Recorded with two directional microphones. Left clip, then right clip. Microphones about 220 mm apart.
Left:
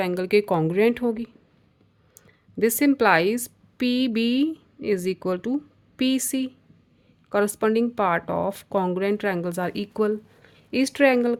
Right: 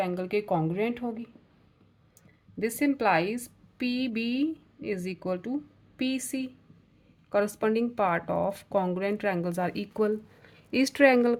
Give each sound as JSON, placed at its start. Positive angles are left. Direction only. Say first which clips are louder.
{"t": 0.0, "sound": "a woman's voice", "louder": "left 8 dB", "side_deg": 40}